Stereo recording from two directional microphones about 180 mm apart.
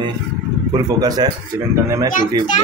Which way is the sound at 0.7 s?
20° right (ahead or behind).